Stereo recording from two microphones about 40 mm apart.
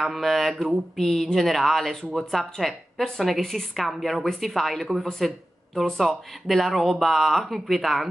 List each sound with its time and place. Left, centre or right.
0.0 s speech: centre
6.4 s speech: centre